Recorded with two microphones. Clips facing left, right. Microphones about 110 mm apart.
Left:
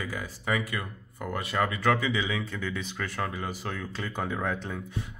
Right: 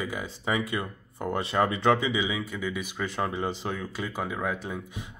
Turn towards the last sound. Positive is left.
turn(degrees=-15)  # may be behind; listen again after turning